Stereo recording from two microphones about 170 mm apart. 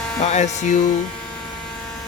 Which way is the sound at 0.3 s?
45° left (ahead or behind).